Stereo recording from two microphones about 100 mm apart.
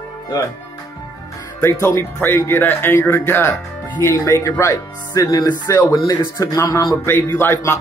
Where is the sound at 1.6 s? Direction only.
25° left (ahead or behind).